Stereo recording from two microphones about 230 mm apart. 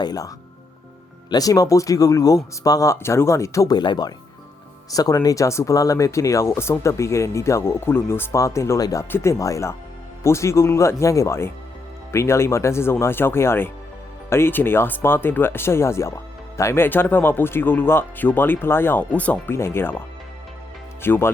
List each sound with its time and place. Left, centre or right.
0.0 s speech: centre
1.3 s speech: centre
21.0 s speech: centre